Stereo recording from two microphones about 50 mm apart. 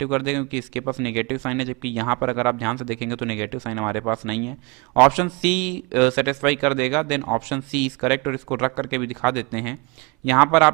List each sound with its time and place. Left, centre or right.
0.0 s a man's voice: centre